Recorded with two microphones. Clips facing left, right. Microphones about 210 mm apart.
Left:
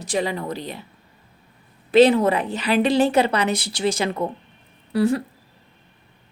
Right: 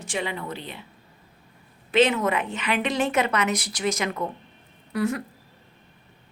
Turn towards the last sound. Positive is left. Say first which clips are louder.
# left 6 dB
turn(degrees=30)  # may be behind; listen again after turning